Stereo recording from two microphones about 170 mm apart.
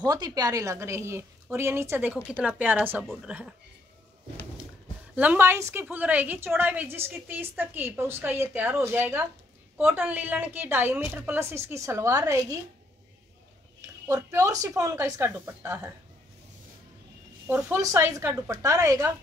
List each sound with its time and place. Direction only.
0.0 s a woman's voice: 20° right (ahead or behind); by 3.5 s 5° right (ahead or behind)
5.1 s a woman's voice: 10° right (ahead or behind)
13.7 s speech: 20° right (ahead or behind)
17.5 s speech: 10° right (ahead or behind)